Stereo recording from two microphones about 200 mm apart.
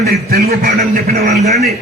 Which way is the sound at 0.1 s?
50° right (ahead or behind).